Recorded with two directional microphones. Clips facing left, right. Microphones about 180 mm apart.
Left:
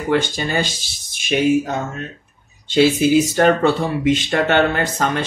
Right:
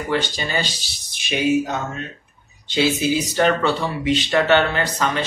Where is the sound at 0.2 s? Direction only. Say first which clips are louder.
Left 3 dB; 50° left (ahead or behind).